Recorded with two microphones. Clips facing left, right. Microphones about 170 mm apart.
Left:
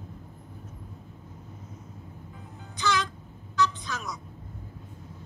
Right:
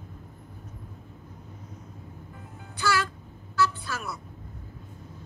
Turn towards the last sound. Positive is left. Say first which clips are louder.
# right 1 dB
turn(degrees=-5)  # may be behind; listen again after turning